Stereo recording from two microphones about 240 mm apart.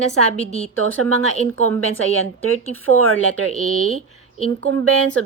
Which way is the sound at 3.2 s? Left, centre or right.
Right.